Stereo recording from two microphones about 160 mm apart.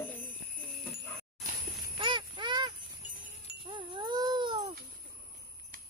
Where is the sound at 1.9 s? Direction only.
30° right (ahead or behind).